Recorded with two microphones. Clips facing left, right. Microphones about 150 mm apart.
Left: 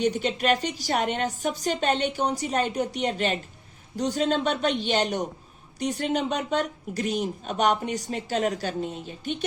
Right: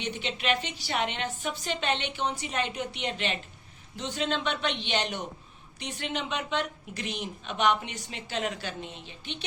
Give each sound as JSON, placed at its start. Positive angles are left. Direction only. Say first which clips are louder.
{"t": 0.0, "sound": "speech", "louder": "left 8 dB", "side_deg": 40}